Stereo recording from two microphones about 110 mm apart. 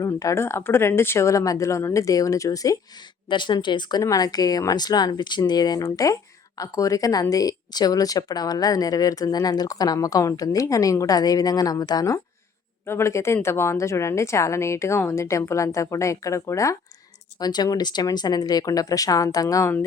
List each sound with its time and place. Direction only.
0.0 s a woman's voice: 30° left (ahead or behind)
3.2 s speech: 45° left (ahead or behind)
12.8 s a woman's voice: 25° left (ahead or behind)